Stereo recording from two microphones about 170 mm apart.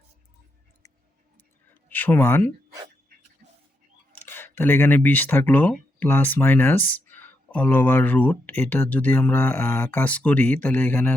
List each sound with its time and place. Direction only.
0.8 s tick-tock: 20° left (ahead or behind)
1.9 s speech: 10° left (ahead or behind)
3.4 s a sound: 45° right (ahead or behind)
4.1 s speech: 10° left (ahead or behind)